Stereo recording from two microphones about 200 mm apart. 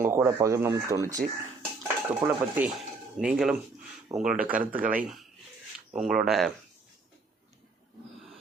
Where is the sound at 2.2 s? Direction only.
15° right (ahead or behind).